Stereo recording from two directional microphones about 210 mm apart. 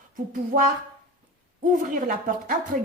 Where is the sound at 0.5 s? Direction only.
40° right (ahead or behind).